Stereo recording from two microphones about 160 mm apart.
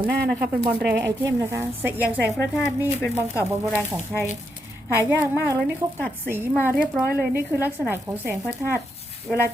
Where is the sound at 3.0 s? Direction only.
15° left (ahead or behind).